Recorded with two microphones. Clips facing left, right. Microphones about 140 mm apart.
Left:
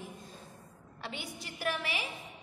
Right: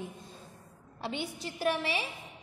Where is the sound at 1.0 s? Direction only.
25° right (ahead or behind).